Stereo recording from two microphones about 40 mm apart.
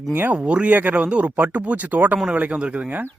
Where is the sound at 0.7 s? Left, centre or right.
Right.